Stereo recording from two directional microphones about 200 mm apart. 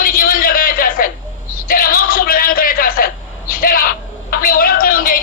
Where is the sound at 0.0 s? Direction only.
45° left (ahead or behind).